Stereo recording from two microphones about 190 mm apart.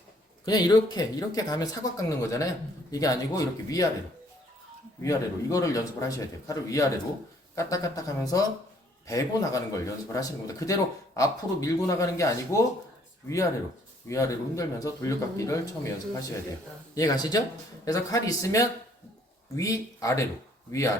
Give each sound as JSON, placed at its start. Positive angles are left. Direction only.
{"t": 0.4, "sound": "speech", "side_deg": 20}
{"t": 5.0, "sound": "speech", "side_deg": 15}